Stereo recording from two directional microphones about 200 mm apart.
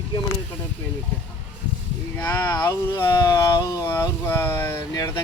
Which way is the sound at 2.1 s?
10° left (ahead or behind).